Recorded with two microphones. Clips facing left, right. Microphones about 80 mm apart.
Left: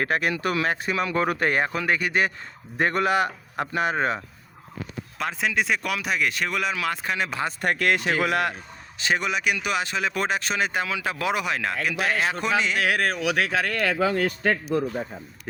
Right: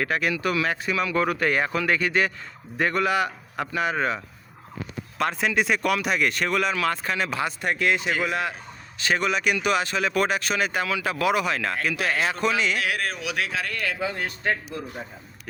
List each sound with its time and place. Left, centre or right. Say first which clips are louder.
0.0 s speech: even; left
5.1 s speech: right 2 dB; centre
7.0 s speech: right 1 dB; centre
7.6 s speech: left 2 dB; left
9.0 s speech: right 1 dB; centre
12.8 s speech: left 4 dB; left